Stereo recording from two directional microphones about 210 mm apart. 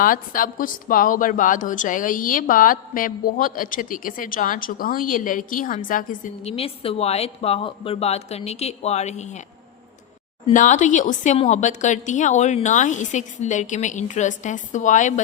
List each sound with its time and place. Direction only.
0.0 s a woman's voice: 40° left (ahead or behind)
10.5 s a woman's voice: 40° left (ahead or behind)